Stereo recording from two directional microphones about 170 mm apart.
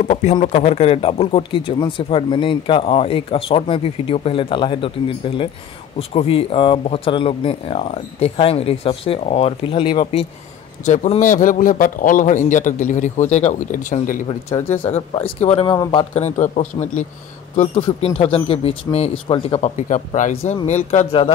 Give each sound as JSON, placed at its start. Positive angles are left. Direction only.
{"t": 0.0, "sound": "a man's voice", "side_deg": 40}
{"t": 10.9, "sound": "a man's voice", "side_deg": 45}
{"t": 14.5, "sound": "speech", "side_deg": 15}
{"t": 14.9, "sound": "a man's voice", "side_deg": 35}
{"t": 15.6, "sound": "speech", "side_deg": 25}
{"t": 16.2, "sound": "a man's voice", "side_deg": 40}
{"t": 19.6, "sound": "a man's voice", "side_deg": 45}